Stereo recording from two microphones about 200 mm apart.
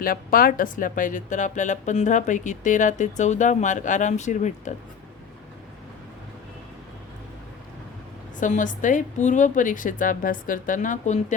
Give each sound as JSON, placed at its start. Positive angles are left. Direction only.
{"t": 0.0, "sound": "speech", "side_deg": 45}
{"t": 8.4, "sound": "speech", "side_deg": 40}